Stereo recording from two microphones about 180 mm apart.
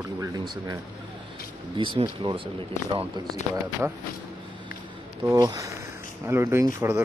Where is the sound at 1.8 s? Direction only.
25° right (ahead or behind).